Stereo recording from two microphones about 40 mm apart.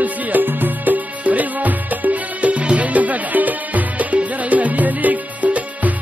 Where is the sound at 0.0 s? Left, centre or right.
Right.